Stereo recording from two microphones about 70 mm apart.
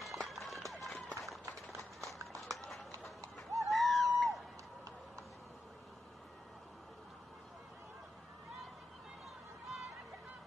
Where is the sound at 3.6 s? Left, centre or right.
Centre.